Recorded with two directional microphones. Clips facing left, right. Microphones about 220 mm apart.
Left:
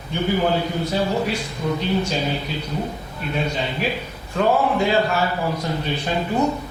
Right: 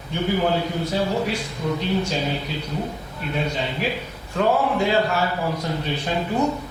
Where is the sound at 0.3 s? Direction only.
15° left (ahead or behind).